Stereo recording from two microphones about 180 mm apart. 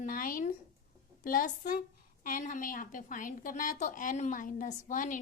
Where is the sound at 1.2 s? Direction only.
50° left (ahead or behind).